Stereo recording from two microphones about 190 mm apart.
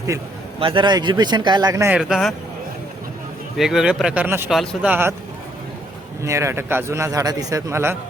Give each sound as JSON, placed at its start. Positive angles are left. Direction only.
{"t": 0.6, "sound": "speech", "side_deg": -25}
{"t": 2.0, "sound": "speech", "side_deg": 0}
{"t": 3.6, "sound": "speech", "side_deg": 0}
{"t": 4.5, "sound": "speech", "side_deg": 0}
{"t": 4.9, "sound": "a man's voice", "side_deg": -10}
{"t": 6.2, "sound": "a man's voice", "side_deg": -15}